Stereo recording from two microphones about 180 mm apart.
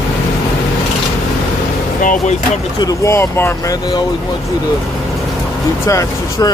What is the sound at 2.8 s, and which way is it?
Speech, 15° left (ahead or behind).